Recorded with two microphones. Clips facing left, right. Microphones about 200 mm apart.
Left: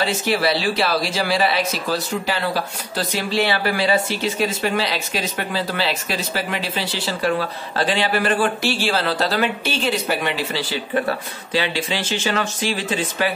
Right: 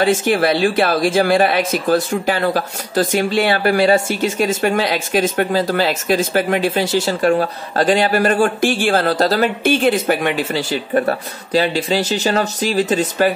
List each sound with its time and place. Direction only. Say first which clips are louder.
0.0 s speech: right 5 dB; 50° right (ahead or behind)